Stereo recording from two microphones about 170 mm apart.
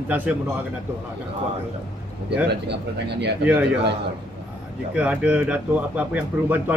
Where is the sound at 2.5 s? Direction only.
80° right.